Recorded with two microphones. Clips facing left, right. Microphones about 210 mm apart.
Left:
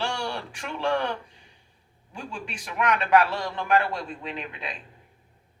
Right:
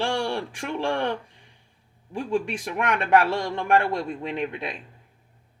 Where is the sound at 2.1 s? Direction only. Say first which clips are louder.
Right 11 dB; 55° right (ahead or behind).